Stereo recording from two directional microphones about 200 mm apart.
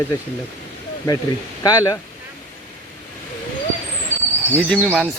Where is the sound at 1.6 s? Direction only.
20° left (ahead or behind).